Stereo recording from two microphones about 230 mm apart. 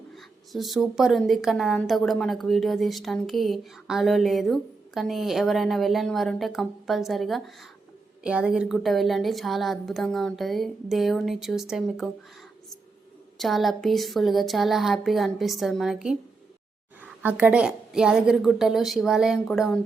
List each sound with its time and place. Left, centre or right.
0.5 s a woman's voice: centre
13.4 s a woman's voice: centre